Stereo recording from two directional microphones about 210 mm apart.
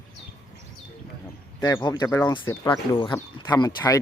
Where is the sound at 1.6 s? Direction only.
20° left (ahead or behind).